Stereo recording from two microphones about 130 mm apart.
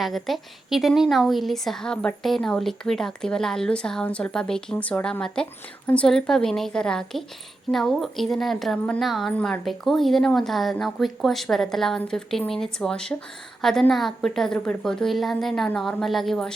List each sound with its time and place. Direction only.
0.0 s a woman's voice: centre (ahead or behind)